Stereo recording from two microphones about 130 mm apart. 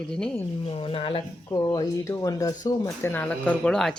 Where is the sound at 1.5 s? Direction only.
30° left (ahead or behind).